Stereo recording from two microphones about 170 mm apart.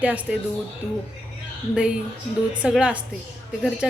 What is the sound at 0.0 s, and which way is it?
Speech, 10° right (ahead or behind).